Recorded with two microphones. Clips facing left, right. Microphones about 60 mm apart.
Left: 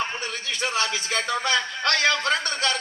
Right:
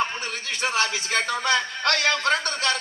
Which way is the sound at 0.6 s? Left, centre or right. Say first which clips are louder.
Right 2 dB; right.